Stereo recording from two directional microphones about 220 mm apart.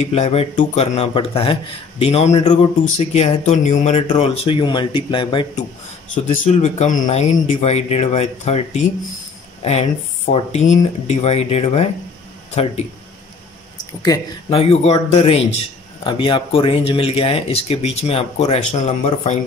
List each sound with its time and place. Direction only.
0.0 s speech: 30° left (ahead or behind)
14.0 s speech: 20° left (ahead or behind)